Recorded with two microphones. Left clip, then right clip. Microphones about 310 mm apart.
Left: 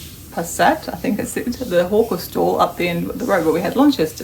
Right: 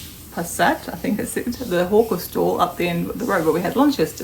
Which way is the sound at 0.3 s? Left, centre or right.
Centre.